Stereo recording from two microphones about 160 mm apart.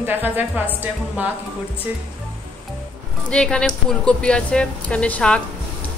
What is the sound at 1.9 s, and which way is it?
Speech, 10° right (ahead or behind).